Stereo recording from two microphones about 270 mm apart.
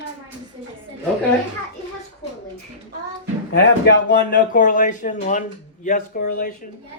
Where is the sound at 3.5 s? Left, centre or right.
Left.